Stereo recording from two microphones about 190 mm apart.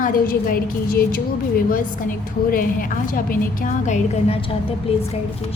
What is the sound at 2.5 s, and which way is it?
A woman's voice, 50° left (ahead or behind).